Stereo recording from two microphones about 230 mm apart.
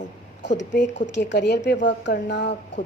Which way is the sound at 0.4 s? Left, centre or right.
Left.